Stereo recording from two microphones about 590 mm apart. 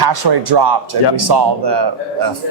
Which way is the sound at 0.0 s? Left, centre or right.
Right.